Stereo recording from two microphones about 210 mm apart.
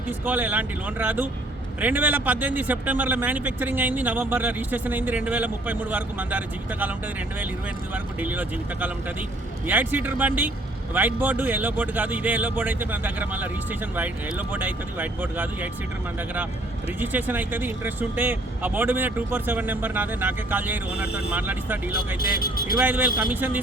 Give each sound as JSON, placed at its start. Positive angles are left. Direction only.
{"t": 0.3, "sound": "a man's voice", "side_deg": -10}
{"t": 7.9, "sound": "a man's voice", "side_deg": -10}
{"t": 17.0, "sound": "a man's voice", "side_deg": -10}
{"t": 22.2, "sound": "speech", "side_deg": 45}
{"t": 22.8, "sound": "a man's voice", "side_deg": -5}